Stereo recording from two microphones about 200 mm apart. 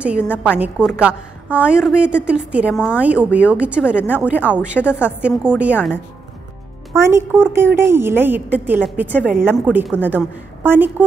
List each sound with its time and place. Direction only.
0.0 s a woman's voice: 5° right (ahead or behind)
7.0 s a woman's voice: 15° right (ahead or behind)